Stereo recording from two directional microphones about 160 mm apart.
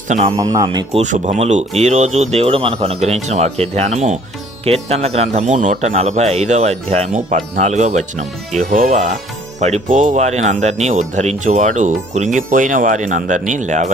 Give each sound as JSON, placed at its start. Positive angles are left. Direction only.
{"t": 0.3, "sound": "speech", "side_deg": -25}
{"t": 0.9, "sound": "speech", "side_deg": -50}